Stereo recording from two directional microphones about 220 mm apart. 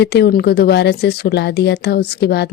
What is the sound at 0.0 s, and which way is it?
Speech, 50° left (ahead or behind).